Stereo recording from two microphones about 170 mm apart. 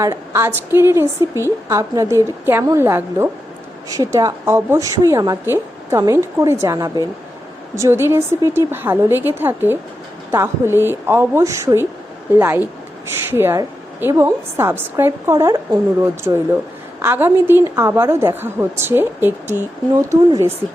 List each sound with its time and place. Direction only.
0.0 s a woman's voice: 15° right (ahead or behind)